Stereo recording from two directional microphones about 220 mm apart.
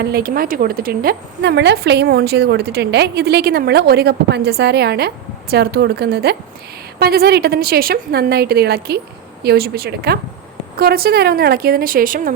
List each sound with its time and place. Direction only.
0.0 s a woman's voice: 45° right (ahead or behind)